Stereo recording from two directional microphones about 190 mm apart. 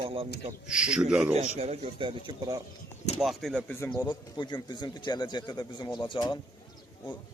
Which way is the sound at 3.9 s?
25° left (ahead or behind).